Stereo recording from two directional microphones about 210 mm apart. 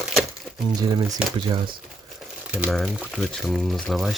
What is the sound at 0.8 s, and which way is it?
Speech, 20° right (ahead or behind).